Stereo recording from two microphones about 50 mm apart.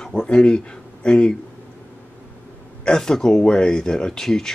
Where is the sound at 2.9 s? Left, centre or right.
Centre.